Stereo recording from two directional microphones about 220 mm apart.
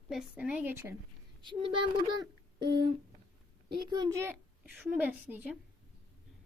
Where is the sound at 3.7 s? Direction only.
45° right (ahead or behind).